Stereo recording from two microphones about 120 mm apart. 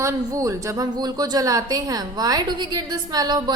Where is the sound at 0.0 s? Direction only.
25° right (ahead or behind).